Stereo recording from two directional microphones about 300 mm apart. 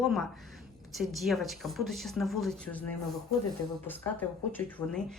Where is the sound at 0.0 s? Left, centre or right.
Centre.